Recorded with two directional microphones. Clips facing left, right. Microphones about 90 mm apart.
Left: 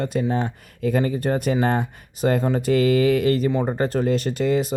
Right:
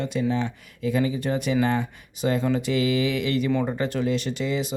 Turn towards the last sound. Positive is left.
turn(degrees=45)  # may be behind; listen again after turning